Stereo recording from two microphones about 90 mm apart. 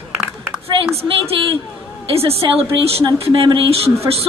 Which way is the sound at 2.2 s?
90° right.